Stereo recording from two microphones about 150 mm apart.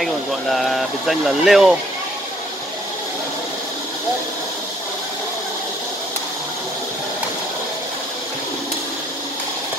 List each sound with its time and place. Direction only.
0.0 s speech: centre (ahead or behind)